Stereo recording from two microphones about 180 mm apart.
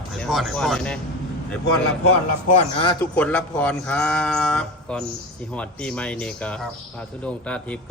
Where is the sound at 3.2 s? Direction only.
5° left (ahead or behind).